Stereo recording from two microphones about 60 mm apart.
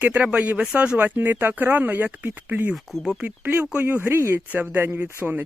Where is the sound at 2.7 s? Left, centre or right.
Centre.